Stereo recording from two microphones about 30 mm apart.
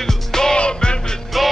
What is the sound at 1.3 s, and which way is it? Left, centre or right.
Music, centre.